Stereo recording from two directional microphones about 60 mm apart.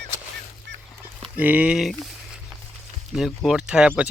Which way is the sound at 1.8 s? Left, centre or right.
Centre.